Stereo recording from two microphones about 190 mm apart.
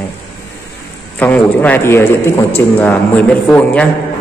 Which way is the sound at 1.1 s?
10° left (ahead or behind).